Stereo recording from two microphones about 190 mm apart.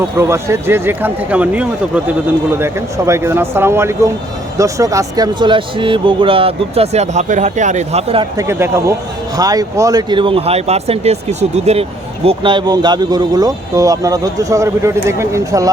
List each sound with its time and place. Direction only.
0.2 s speech: 15° right (ahead or behind); by 8.3 s 30° right (ahead or behind)
8.4 s speech: 15° right (ahead or behind)